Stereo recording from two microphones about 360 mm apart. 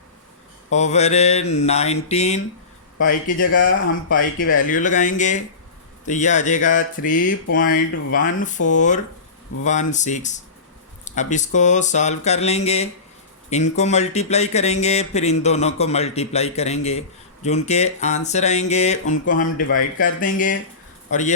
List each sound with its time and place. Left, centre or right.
0.7 s speech: centre
3.4 s speech: left